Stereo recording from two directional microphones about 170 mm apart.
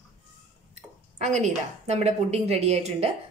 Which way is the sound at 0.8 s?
40° right (ahead or behind).